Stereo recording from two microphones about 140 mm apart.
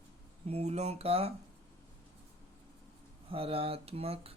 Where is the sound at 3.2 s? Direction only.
40° right (ahead or behind).